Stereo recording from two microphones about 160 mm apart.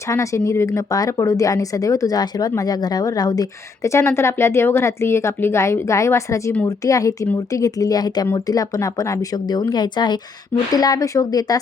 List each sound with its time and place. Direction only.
0.1 s speech: 20° left (ahead or behind)